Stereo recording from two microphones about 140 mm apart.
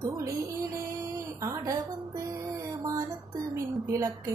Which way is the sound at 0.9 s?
20° right (ahead or behind).